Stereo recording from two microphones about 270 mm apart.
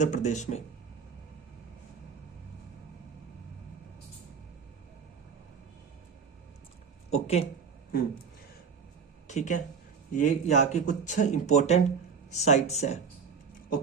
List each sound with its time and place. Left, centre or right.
0.0 s speech: left
7.1 s speech: left
9.2 s speech: left